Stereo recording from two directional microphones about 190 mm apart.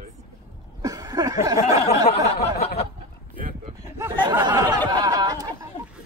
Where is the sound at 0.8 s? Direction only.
20° right (ahead or behind).